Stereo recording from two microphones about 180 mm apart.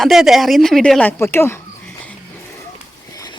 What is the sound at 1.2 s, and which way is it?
Speech, 15° left (ahead or behind).